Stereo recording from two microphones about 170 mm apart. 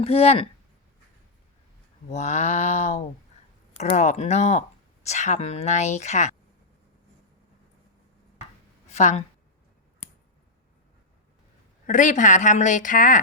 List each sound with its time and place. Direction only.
0.0 s a woman's voice: 35° left (ahead or behind)
2.0 s a woman's voice: 40° left (ahead or behind)
8.9 s speech: 45° left (ahead or behind)
11.9 s speech: 50° left (ahead or behind)